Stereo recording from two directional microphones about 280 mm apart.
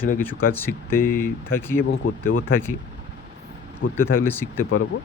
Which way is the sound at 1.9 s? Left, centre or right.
Left.